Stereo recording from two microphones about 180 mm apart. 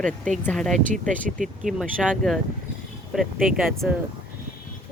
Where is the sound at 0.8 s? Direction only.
45° right (ahead or behind).